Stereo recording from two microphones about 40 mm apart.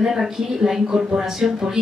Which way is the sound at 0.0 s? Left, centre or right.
Centre.